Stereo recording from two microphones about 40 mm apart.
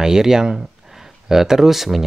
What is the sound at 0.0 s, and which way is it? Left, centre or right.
Speech, centre.